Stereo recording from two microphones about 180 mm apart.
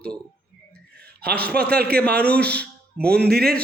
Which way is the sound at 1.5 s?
60° right (ahead or behind).